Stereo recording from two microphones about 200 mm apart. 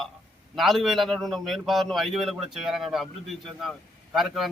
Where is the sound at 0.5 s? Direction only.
Centre (ahead or behind).